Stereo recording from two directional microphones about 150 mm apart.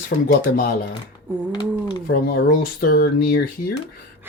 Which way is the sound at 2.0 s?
85° left.